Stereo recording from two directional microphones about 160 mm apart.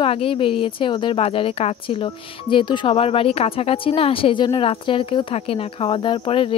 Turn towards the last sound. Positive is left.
turn(degrees=35)  # may be behind; listen again after turning